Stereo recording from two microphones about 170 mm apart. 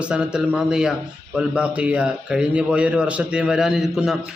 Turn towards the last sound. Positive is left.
turn(degrees=0)  # may be behind; listen again after turning